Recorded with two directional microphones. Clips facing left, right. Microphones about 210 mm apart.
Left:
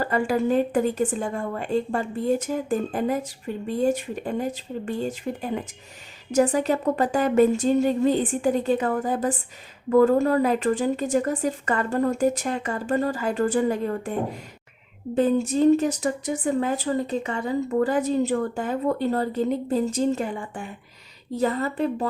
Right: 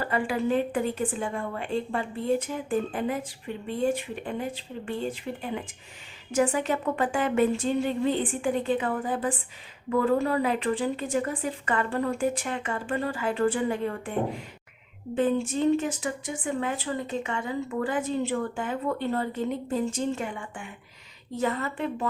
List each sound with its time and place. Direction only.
0.0 s a woman's voice: 40° left (ahead or behind)
15.1 s speech: 40° left (ahead or behind)